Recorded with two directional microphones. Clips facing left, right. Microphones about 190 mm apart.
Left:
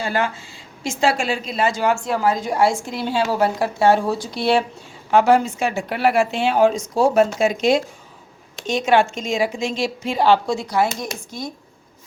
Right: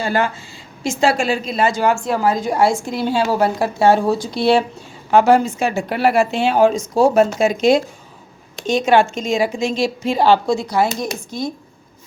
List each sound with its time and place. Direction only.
0.0 s a woman's voice: 40° right (ahead or behind)